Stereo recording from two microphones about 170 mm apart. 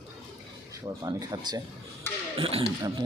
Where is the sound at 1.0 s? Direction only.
20° right (ahead or behind).